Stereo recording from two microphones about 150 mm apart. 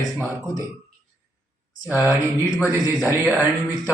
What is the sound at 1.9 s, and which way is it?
A man's voice, 15° right (ahead or behind).